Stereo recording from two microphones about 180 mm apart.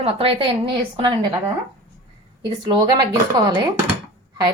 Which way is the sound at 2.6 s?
25° right (ahead or behind).